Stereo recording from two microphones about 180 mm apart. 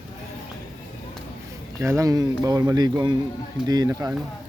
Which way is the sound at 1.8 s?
15° right (ahead or behind).